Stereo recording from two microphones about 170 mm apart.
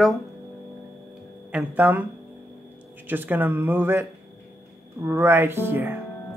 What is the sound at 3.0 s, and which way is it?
Speech, 10° right (ahead or behind).